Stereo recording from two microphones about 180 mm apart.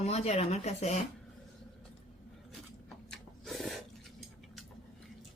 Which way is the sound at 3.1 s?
Centre (ahead or behind).